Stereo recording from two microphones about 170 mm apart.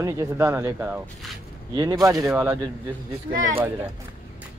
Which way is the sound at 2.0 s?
20° right (ahead or behind).